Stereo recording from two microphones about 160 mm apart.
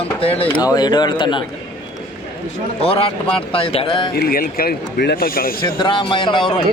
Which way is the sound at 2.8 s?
35° left (ahead or behind).